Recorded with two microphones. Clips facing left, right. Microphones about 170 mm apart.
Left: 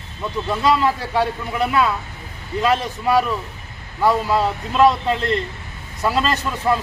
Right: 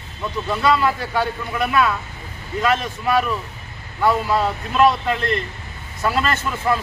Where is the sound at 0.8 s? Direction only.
25° left (ahead or behind).